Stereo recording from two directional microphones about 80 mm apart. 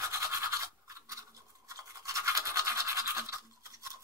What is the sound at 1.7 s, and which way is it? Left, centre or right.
Toothbrush, right.